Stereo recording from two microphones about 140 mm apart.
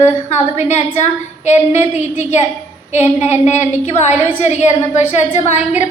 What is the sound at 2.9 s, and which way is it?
A woman's voice, 55° left (ahead or behind).